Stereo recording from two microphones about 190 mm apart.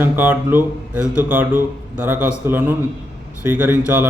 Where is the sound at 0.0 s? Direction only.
10° right (ahead or behind).